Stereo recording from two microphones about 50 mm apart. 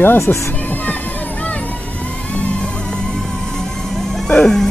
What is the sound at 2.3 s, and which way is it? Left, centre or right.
Music, left.